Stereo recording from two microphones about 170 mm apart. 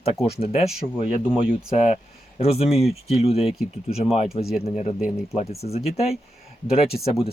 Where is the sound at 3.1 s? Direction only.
35° left (ahead or behind).